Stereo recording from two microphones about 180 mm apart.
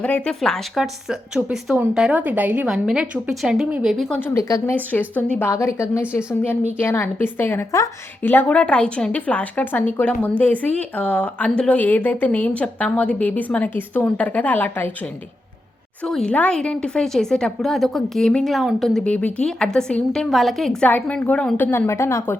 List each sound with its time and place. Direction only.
0.0 s a woman's voice: 5° left (ahead or behind)
4.2 s a woman's voice: 15° left (ahead or behind)
16.0 s a woman's voice: 5° left (ahead or behind)